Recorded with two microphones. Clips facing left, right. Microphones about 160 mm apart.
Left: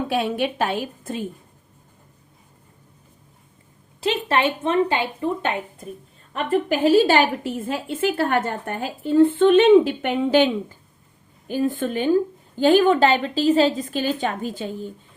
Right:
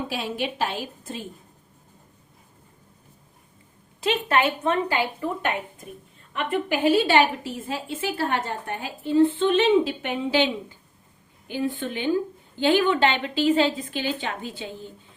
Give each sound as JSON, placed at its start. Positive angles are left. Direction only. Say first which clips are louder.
{"t": 0.1, "sound": "a woman's voice", "louder": "left 6 dB", "side_deg": 55}
{"t": 4.0, "sound": "a woman's voice", "louder": "left 1 dB", "side_deg": 30}
{"t": 6.3, "sound": "a woman's voice", "louder": "left 4 dB", "side_deg": 40}